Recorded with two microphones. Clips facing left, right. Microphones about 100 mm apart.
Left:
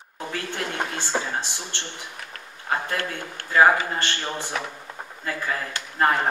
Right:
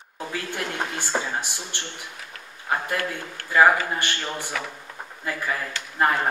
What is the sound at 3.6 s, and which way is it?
Speech, 20° left (ahead or behind).